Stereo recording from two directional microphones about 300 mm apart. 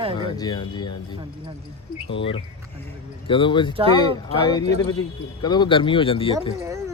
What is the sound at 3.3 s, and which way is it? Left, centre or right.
Speech, centre.